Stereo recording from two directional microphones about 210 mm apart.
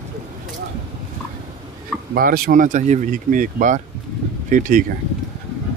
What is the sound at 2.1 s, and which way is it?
Speech, 45° right (ahead or behind).